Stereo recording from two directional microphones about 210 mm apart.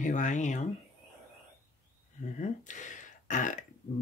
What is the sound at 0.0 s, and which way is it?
Speech, 35° left (ahead or behind).